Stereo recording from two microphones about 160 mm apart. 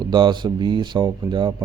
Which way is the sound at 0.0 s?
25° right (ahead or behind).